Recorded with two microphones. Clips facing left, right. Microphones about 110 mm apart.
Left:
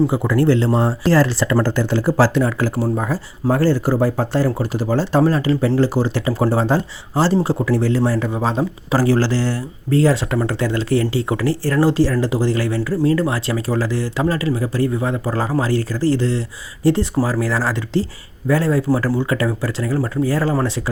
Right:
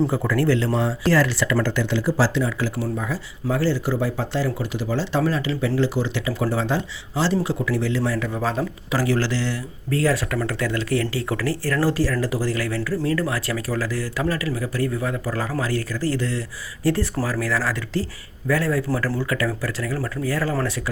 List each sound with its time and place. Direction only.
0.1 s speech: 20° left (ahead or behind); by 8.3 s 35° left (ahead or behind)
8.3 s speech: 25° left (ahead or behind)